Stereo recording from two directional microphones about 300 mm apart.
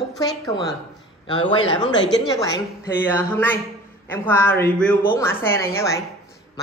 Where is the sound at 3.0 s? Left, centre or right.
Centre.